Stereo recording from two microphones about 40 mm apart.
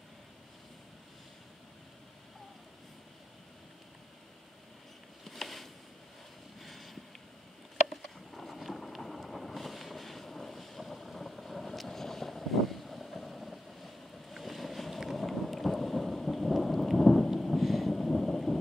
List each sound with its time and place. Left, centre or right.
5.2 s a sound: centre
6.6 s vehicle: centre
7.9 s vehicle: centre
17.4 s thunder: centre